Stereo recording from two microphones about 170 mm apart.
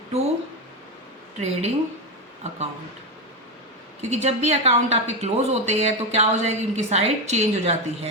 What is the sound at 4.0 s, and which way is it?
A woman's voice, 40° right (ahead or behind).